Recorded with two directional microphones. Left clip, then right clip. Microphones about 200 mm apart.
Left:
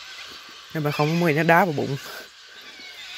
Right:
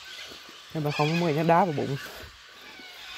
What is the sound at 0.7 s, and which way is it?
Speech, 15° left (ahead or behind).